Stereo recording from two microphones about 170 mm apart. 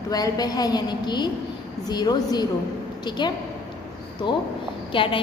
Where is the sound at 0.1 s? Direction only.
25° left (ahead or behind).